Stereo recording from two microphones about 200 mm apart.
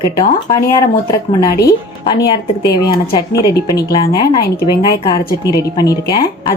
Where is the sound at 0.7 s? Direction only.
15° left (ahead or behind).